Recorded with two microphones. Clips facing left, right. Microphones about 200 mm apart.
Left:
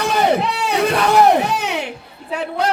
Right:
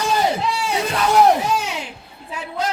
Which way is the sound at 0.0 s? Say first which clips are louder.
Left 3 dB; 65° left (ahead or behind).